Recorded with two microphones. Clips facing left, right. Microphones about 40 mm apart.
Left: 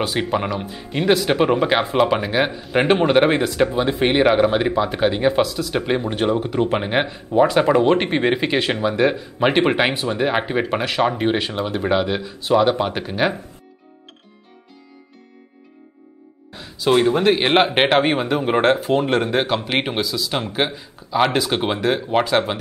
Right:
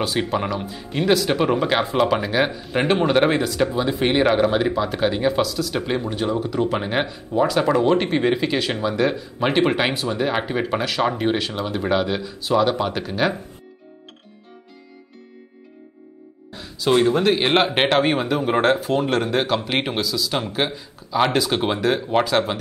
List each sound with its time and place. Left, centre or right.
0.0 s speech: centre
6.0 s speech: left; by 13.4 s centre
16.5 s speech: centre